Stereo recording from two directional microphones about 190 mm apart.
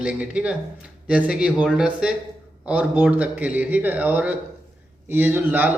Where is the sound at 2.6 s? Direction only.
5° right (ahead or behind).